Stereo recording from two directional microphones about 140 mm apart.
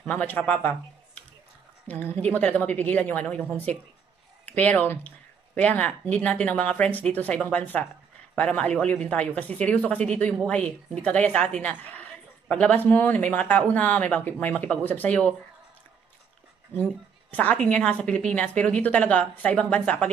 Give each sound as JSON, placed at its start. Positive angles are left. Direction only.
{"t": 0.0, "sound": "a woman's voice", "side_deg": 10}
{"t": 1.9, "sound": "a woman's voice", "side_deg": 15}
{"t": 4.5, "sound": "a woman's voice", "side_deg": 10}
{"t": 16.7, "sound": "a woman's voice", "side_deg": 10}